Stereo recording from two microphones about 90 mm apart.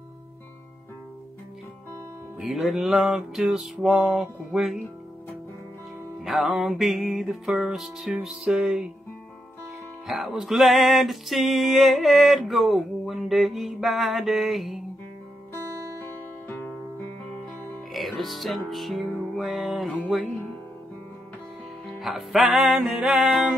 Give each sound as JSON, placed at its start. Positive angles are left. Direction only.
{"t": 2.4, "sound": "music", "side_deg": -5}
{"t": 6.1, "sound": "music", "side_deg": 0}
{"t": 10.0, "sound": "music", "side_deg": -5}
{"t": 16.4, "sound": "music", "side_deg": 20}
{"t": 17.9, "sound": "music", "side_deg": 0}
{"t": 21.8, "sound": "music", "side_deg": 0}